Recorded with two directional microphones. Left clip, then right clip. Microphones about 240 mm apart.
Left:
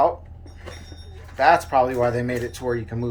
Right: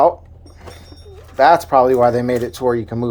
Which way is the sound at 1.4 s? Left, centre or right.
Right.